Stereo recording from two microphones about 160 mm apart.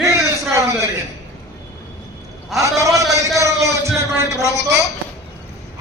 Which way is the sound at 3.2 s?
20° right (ahead or behind).